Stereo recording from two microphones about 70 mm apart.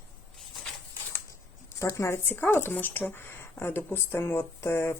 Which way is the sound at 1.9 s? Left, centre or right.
Left.